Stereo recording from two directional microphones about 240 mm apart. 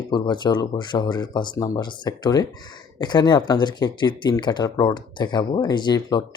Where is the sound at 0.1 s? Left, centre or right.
Centre.